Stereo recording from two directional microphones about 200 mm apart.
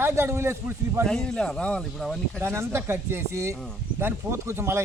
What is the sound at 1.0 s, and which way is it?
Speech, 5° left (ahead or behind).